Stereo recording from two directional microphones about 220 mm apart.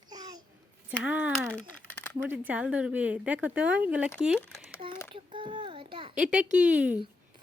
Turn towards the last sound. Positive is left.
turn(degrees=-5)  # may be behind; listen again after turning